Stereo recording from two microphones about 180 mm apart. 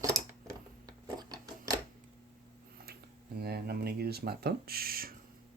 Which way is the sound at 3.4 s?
60° right (ahead or behind).